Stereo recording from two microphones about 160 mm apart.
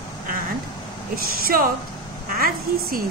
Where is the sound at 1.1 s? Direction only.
65° right (ahead or behind).